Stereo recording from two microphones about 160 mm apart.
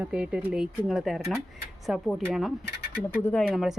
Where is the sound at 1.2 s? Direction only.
15° right (ahead or behind).